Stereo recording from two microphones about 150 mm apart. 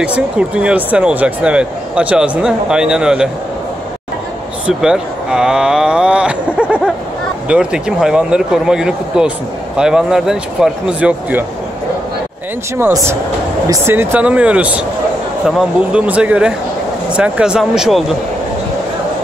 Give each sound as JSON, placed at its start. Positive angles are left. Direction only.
{"t": 0.0, "sound": "speech", "side_deg": -10}
{"t": 4.6, "sound": "speech", "side_deg": -5}
{"t": 12.7, "sound": "speech", "side_deg": -20}